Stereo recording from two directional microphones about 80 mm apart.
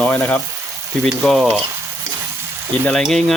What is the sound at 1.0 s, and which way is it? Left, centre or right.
Speech, centre.